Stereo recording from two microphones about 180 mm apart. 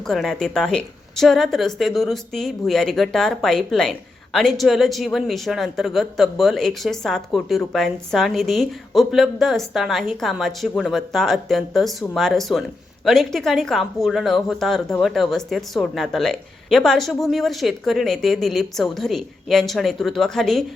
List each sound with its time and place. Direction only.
0.1 s a woman's voice: centre (ahead or behind)